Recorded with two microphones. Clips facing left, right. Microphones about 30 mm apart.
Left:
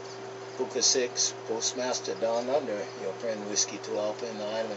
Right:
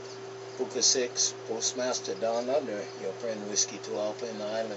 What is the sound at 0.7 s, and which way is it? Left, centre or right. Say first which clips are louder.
Speech: left 1 dB; centre.